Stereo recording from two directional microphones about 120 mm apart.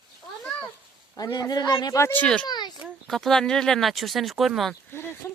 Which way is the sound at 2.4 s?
35° left (ahead or behind).